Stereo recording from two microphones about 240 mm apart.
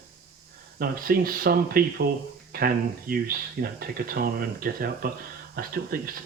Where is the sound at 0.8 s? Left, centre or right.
Right.